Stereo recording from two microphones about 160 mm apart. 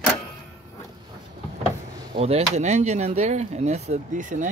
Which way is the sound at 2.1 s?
40° right (ahead or behind).